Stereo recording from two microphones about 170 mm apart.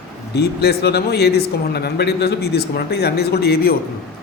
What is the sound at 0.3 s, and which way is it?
Speech, 75° left (ahead or behind).